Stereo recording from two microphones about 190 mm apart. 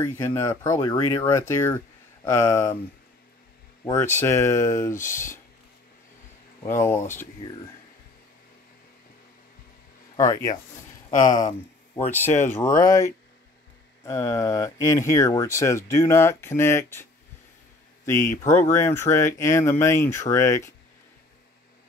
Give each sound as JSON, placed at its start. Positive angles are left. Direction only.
{"t": 0.2, "sound": "speech", "side_deg": 15}
{"t": 3.8, "sound": "speech", "side_deg": 15}
{"t": 4.9, "sound": "speech", "side_deg": 45}
{"t": 7.4, "sound": "speech", "side_deg": 25}
{"t": 10.1, "sound": "speech", "side_deg": 20}